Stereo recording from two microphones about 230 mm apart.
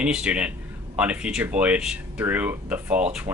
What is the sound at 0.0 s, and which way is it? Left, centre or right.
Speech, centre.